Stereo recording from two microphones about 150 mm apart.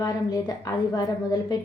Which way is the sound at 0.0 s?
25° left (ahead or behind).